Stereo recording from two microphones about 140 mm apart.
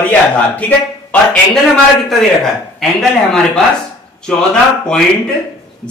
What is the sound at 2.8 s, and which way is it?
Speech, centre (ahead or behind).